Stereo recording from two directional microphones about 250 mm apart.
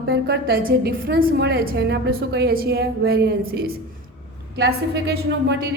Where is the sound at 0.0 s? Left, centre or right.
Right.